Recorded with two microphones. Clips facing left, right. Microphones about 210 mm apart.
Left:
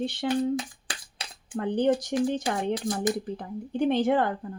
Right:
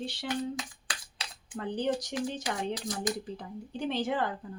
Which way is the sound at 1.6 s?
55° left (ahead or behind).